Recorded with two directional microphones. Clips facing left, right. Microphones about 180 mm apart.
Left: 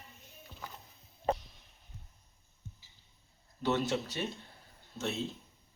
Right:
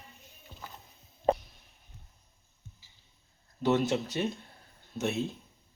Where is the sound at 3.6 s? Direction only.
15° right (ahead or behind).